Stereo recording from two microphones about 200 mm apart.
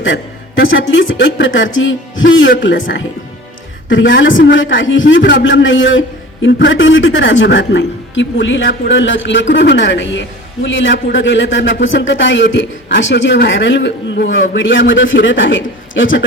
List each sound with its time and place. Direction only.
0.0 s a sound: 70° left (ahead or behind)
0.7 s a man's voice: 70° left (ahead or behind)
3.8 s a man's voice: 65° left (ahead or behind)